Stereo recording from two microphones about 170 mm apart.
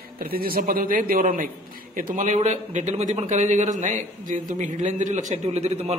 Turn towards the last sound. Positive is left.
turn(degrees=-40)  # may be behind; listen again after turning